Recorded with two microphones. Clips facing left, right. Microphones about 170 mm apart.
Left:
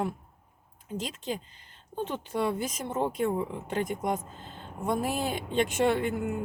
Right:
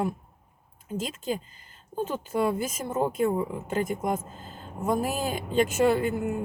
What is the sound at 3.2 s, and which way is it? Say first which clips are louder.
Speech: right 3 dB; 45° right (ahead or behind).